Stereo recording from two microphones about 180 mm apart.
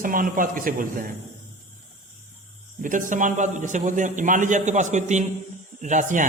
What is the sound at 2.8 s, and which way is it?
A man's voice, 45° right (ahead or behind).